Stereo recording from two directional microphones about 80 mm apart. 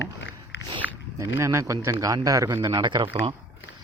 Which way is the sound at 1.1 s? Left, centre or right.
Right.